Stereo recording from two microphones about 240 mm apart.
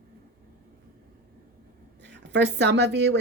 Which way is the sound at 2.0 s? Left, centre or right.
Right.